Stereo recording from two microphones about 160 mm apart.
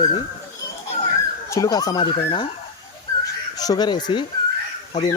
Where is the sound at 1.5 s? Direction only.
20° left (ahead or behind).